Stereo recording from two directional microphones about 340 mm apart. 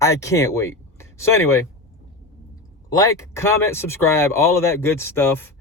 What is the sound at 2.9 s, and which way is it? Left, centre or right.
Speech, centre.